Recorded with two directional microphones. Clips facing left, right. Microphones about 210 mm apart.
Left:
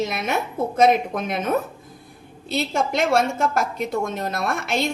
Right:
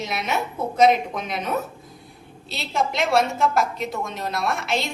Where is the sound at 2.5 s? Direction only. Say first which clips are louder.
Left 3 dB; 50° left (ahead or behind).